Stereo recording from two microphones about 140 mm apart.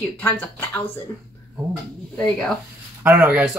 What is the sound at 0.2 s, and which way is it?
Speech, 15° left (ahead or behind).